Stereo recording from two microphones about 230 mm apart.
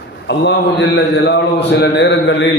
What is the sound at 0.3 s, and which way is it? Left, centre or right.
A man's voice, left.